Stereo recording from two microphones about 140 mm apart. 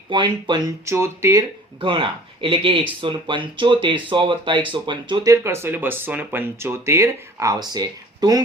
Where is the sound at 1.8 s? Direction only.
35° right (ahead or behind).